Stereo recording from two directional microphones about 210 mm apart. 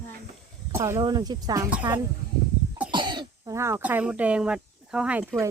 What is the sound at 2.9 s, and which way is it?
Speech, 20° right (ahead or behind).